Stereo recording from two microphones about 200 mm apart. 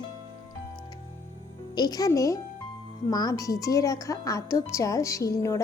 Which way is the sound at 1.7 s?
20° left (ahead or behind).